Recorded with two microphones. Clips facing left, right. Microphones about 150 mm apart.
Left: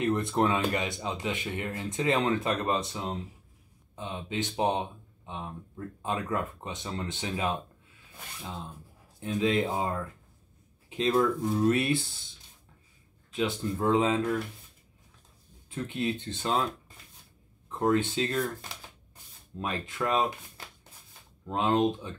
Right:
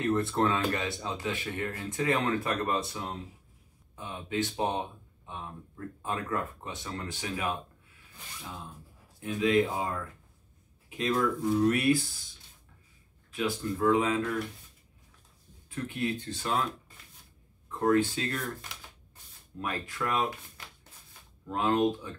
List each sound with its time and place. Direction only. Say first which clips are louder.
0.0 s speech: left 1 dB; 20° left (ahead or behind)
9.2 s speech: right 1 dB; 30° left (ahead or behind)
13.3 s speech: left 1 dB; 25° left (ahead or behind)
15.7 s speech: left 1 dB; 25° left (ahead or behind)
17.6 s speech: right 1 dB; 20° left (ahead or behind)